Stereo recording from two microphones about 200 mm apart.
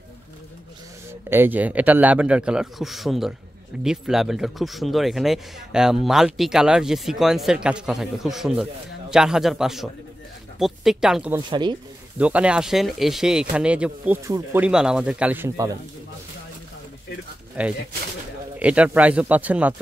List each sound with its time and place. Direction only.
1.3 s speech: 10° right (ahead or behind)
11.3 s speech: 20° right (ahead or behind)
12.2 s speech: 5° right (ahead or behind)
17.6 s speech: 5° right (ahead or behind)